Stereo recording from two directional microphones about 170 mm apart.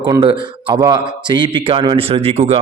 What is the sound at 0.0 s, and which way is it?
Speech, 25° right (ahead or behind).